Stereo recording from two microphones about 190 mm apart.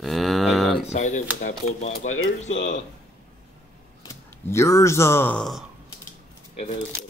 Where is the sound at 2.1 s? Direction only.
90° left.